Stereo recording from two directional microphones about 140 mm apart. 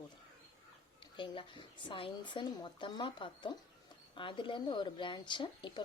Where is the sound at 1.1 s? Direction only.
35° left (ahead or behind).